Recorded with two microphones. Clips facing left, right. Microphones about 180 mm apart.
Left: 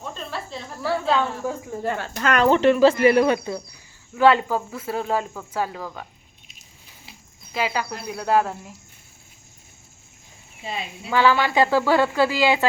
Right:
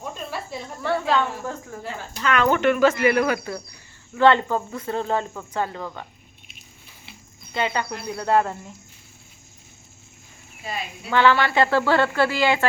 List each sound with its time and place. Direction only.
0.0 s cricket: 10° right (ahead or behind)
1.1 s speech: 10° left (ahead or behind)
1.8 s speech: 55° left (ahead or behind)
2.5 s speech: 30° left (ahead or behind)
4.1 s speech: 5° left (ahead or behind)
7.5 s speech: 5° left (ahead or behind)
10.6 s speech: 25° left (ahead or behind)
11.1 s speech: 10° left (ahead or behind)